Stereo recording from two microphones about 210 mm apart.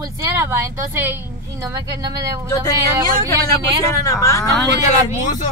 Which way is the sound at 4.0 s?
15° left (ahead or behind).